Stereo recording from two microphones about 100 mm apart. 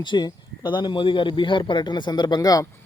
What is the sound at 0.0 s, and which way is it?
A man's voice, 50° left (ahead or behind).